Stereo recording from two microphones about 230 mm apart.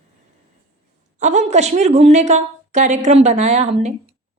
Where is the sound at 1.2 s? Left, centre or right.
Right.